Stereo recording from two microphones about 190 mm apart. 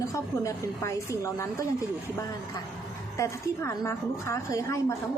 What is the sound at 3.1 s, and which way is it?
A woman's voice, 15° left (ahead or behind).